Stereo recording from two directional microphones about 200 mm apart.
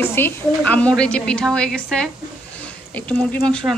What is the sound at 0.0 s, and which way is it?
A woman's voice, 10° left (ahead or behind).